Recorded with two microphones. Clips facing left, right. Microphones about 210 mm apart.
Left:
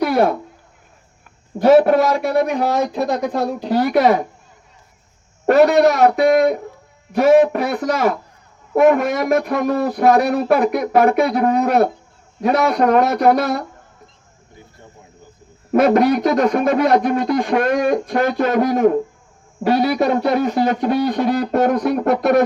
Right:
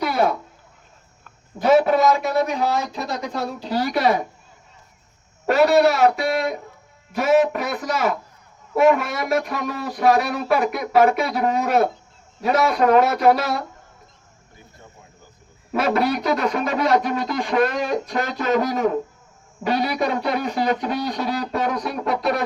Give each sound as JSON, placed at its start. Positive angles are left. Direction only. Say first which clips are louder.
{"t": 0.0, "sound": "a sound", "louder": "left 5 dB", "side_deg": 55}
{"t": 1.5, "sound": "speech", "louder": "left 5 dB", "side_deg": 50}
{"t": 2.3, "sound": "speech", "louder": "left 4 dB", "side_deg": 15}
{"t": 3.1, "sound": "speech", "louder": "left 7 dB", "side_deg": 55}
{"t": 5.5, "sound": "speech", "louder": "left 4 dB", "side_deg": 45}
{"t": 6.1, "sound": "speech", "louder": "left 9 dB", "side_deg": 50}
{"t": 15.7, "sound": "speech", "louder": "left 7 dB", "side_deg": 45}